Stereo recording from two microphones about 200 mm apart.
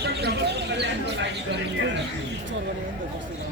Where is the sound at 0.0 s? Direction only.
55° right (ahead or behind).